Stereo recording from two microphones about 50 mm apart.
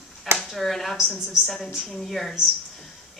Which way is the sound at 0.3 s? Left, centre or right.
Centre.